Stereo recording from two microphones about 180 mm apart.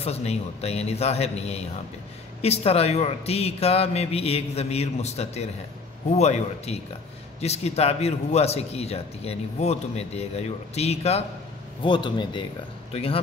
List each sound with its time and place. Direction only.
0.0 s a man's voice: 35° left (ahead or behind)